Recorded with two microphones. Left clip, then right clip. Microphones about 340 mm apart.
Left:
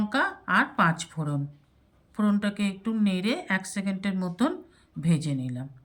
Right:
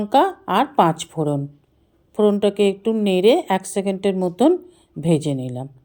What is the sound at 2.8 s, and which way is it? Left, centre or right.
A woman's voice, centre.